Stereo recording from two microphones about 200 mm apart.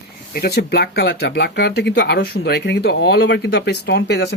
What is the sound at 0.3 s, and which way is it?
Speech, 50° left (ahead or behind).